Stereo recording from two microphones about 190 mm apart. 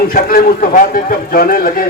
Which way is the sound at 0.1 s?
50° left (ahead or behind).